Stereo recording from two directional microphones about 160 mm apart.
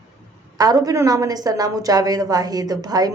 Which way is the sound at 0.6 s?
25° right (ahead or behind).